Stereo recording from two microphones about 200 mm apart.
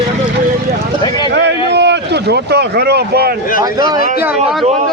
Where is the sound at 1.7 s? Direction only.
60° right (ahead or behind).